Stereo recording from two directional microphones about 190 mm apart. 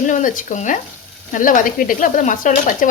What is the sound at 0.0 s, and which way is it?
Speech, 40° left (ahead or behind).